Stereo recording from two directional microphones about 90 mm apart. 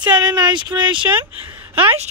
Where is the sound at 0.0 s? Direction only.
55° right (ahead or behind).